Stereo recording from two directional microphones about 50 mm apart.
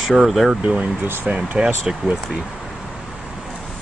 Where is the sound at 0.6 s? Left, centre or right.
Right.